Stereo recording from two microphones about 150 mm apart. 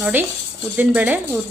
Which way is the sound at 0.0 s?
10° right (ahead or behind).